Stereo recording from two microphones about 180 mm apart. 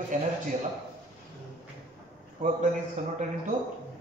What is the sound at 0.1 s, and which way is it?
Speech, 45° right (ahead or behind).